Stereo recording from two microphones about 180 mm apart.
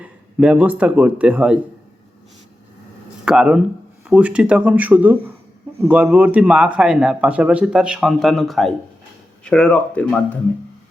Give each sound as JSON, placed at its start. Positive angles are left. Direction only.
{"t": 0.0, "sound": "a man's voice", "side_deg": -5}
{"t": 3.2, "sound": "speech", "side_deg": -5}